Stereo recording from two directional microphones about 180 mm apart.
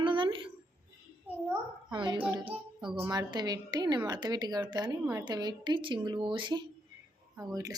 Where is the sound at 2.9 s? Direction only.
10° right (ahead or behind).